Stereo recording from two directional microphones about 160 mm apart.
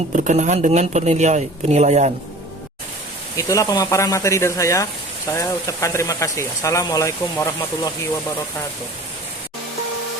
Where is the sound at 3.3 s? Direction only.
20° left (ahead or behind).